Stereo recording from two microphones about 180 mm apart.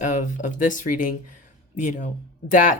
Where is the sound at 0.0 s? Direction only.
45° left (ahead or behind).